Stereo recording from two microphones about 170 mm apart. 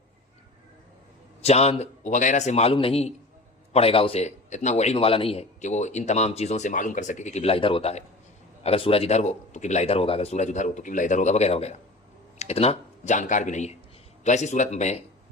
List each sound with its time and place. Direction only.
1.4 s a man's voice: 35° left (ahead or behind)